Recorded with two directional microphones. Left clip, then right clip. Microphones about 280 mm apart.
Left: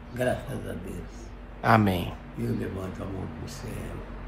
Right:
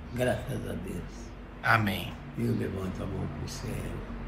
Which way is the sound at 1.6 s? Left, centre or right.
Left.